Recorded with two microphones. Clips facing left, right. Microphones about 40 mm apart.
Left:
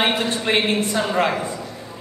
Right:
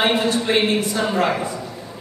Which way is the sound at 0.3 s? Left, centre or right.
Left.